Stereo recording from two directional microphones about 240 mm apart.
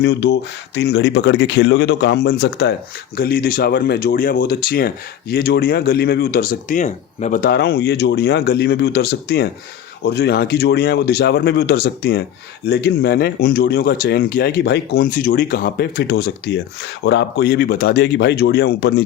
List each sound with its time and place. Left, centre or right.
0.0 s speech: left